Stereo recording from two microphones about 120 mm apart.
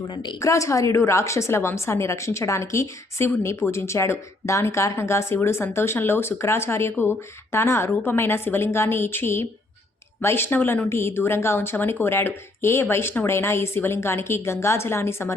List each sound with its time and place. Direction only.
0.1 s a woman's voice: 40° left (ahead or behind)
0.3 s speech: 25° left (ahead or behind)